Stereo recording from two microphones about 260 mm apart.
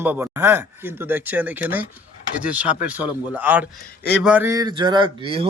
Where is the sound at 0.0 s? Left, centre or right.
Centre.